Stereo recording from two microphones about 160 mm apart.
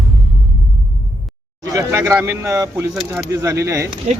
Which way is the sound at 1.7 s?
20° right (ahead or behind).